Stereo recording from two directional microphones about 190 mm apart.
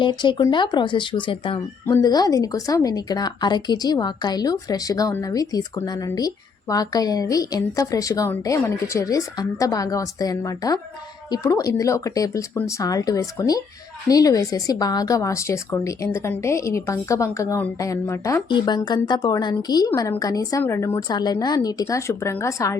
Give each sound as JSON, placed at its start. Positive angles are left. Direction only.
{"t": 0.0, "sound": "a woman's voice", "side_deg": 25}